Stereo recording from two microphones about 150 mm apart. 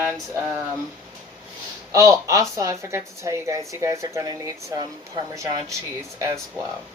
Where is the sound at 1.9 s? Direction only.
20° right (ahead or behind).